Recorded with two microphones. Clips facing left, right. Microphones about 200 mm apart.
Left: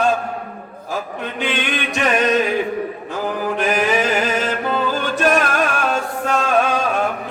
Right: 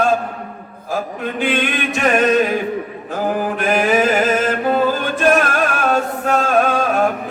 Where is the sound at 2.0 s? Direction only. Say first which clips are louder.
Right 2 dB; 45° right (ahead or behind).